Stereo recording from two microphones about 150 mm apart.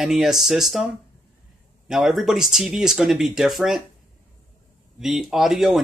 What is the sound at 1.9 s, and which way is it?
Speech, centre (ahead or behind).